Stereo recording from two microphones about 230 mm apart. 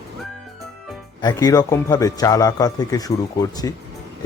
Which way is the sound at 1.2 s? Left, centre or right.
Centre.